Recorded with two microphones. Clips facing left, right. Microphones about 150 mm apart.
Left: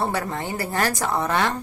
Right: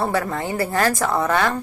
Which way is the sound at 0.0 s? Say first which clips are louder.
Right 3 dB; 20° left (ahead or behind).